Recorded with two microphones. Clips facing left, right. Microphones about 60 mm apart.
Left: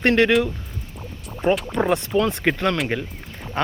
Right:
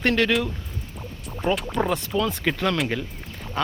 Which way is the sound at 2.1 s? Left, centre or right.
Left.